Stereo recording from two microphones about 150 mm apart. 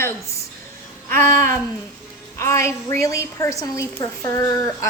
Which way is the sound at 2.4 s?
20° left (ahead or behind).